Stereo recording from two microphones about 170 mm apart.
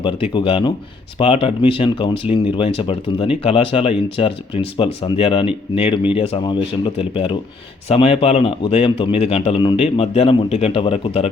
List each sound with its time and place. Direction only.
0.0 s a man's voice: 30° left (ahead or behind)